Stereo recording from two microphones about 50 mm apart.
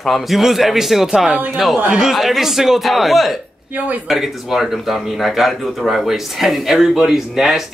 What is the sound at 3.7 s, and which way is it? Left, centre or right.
Speech, right.